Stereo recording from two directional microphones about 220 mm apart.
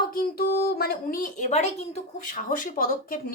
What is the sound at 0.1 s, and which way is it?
Speech, 45° left (ahead or behind).